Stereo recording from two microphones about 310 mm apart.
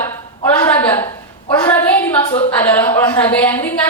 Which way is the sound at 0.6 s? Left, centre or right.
Centre.